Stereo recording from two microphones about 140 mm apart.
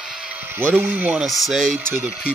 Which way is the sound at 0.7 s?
15° right (ahead or behind).